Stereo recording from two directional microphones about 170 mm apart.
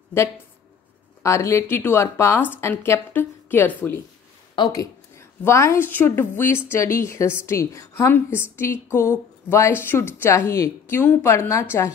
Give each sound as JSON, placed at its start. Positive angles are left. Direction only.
{"t": 1.2, "sound": "a woman's voice", "side_deg": 15}